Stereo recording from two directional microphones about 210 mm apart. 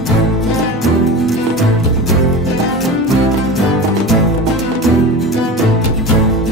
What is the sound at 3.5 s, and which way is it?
Music, centre (ahead or behind).